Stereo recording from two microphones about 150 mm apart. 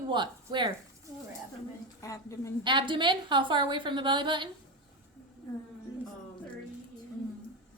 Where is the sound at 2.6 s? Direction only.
30° right (ahead or behind).